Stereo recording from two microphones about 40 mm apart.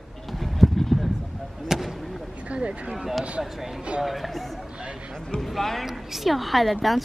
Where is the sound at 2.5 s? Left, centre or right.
Right.